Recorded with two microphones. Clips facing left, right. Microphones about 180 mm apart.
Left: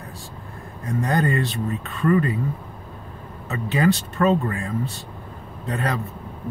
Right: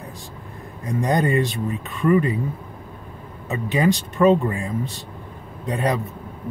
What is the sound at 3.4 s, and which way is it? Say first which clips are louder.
Speech: right 1 dB; 15° right (ahead or behind).